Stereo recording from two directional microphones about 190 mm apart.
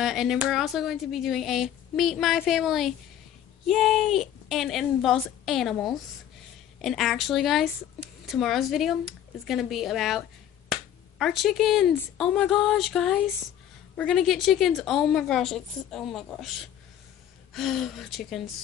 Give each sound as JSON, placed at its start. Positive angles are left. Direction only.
{"t": 0.0, "sound": "speech", "side_deg": 0}
{"t": 17.6, "sound": "speech", "side_deg": 0}